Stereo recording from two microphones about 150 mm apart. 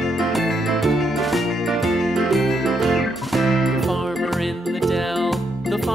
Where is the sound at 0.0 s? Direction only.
Centre (ahead or behind).